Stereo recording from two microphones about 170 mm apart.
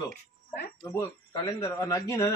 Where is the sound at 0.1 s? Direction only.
70° left (ahead or behind).